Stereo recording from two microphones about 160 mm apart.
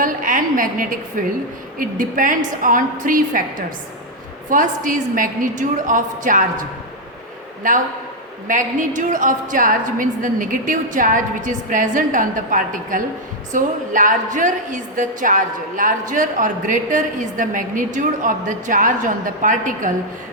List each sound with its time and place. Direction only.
0.0 s a woman's voice: 55° right (ahead or behind)
4.4 s a woman's voice: 55° right (ahead or behind)